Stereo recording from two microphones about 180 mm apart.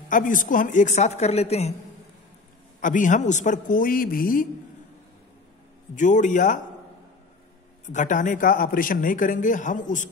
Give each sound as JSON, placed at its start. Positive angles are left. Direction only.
{"t": 0.1, "sound": "a woman's voice", "side_deg": 50}
{"t": 2.8, "sound": "speech", "side_deg": 45}
{"t": 5.9, "sound": "speech", "side_deg": 45}
{"t": 7.9, "sound": "speech", "side_deg": 45}